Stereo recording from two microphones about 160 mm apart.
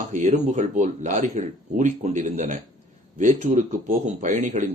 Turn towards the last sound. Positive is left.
turn(degrees=-50)  # may be behind; listen again after turning